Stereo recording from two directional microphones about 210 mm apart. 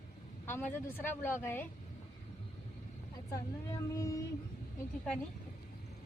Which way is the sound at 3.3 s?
15° left (ahead or behind).